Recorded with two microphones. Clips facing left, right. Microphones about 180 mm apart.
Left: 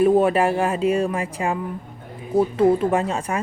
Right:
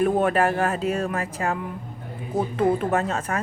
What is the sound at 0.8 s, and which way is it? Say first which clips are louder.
Speech: left 5 dB; 40° right (ahead or behind).